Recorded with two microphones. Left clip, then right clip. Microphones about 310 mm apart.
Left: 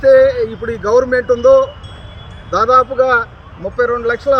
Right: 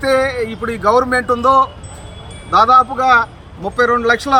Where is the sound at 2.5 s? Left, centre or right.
Right.